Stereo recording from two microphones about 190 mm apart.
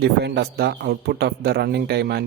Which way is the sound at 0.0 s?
60° right (ahead or behind).